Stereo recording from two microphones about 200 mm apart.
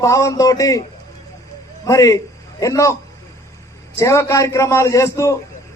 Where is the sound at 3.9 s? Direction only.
15° left (ahead or behind).